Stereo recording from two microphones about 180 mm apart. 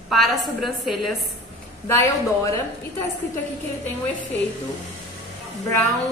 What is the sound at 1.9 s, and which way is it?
Speech, 15° left (ahead or behind).